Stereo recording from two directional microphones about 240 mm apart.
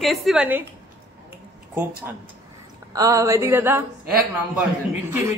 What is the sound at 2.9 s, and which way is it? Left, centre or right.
Speech, centre.